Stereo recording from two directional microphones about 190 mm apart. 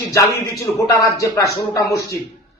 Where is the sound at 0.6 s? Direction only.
15° left (ahead or behind).